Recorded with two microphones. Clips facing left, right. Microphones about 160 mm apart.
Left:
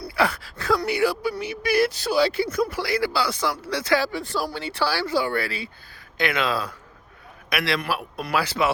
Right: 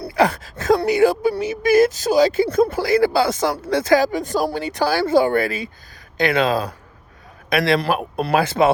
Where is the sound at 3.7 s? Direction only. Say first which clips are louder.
Right 7 dB; 50° right (ahead or behind).